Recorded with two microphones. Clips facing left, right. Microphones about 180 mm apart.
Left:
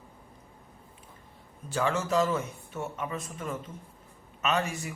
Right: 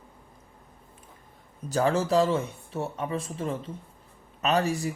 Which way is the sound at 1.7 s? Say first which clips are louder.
Right 4 dB; 35° right (ahead or behind).